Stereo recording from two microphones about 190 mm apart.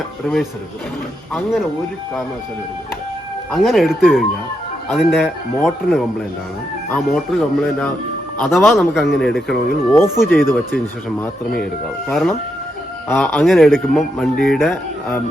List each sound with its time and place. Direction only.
0.3 s speech: centre (ahead or behind)
3.5 s speech: centre (ahead or behind)
9.9 s speech: 10° left (ahead or behind)
11.6 s speech: 5° left (ahead or behind)